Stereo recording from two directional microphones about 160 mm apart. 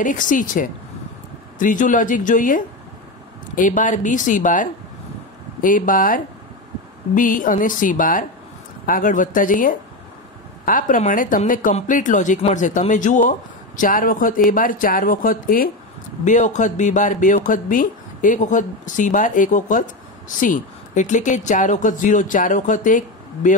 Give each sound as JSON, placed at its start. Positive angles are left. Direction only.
{"t": 0.0, "sound": "a man's voice", "side_deg": 55}
{"t": 16.3, "sound": "speech", "side_deg": 50}